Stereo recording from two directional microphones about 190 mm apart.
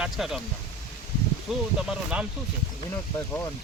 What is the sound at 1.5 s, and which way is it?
Speech, 5° right (ahead or behind).